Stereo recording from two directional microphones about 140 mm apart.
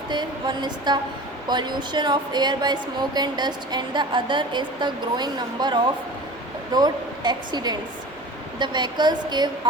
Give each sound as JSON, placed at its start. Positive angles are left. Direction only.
{"t": 0.1, "sound": "a woman's voice", "side_deg": -30}